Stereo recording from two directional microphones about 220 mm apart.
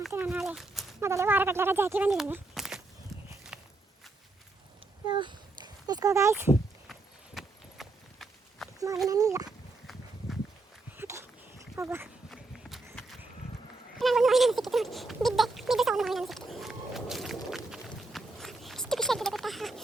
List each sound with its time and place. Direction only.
0.1 s speech: 5° right (ahead or behind)
1.0 s speech: 10° right (ahead or behind)
3.1 s clip-clop: centre (ahead or behind)
3.5 s walk: 5° right (ahead or behind)
5.0 s a child's voice: 20° right (ahead or behind)
7.3 s clip-clop: centre (ahead or behind)
9.0 s speech: 15° right (ahead or behind)
9.5 s a sound: centre (ahead or behind)
10.9 s a sound: 10° right (ahead or behind)
11.8 s speech: 10° right (ahead or behind)
12.3 s run: centre (ahead or behind)
14.0 s a sound: centre (ahead or behind)